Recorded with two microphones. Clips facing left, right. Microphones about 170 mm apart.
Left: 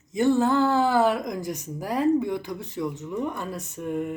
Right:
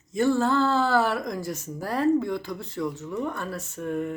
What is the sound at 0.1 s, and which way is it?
Speech, 20° left (ahead or behind).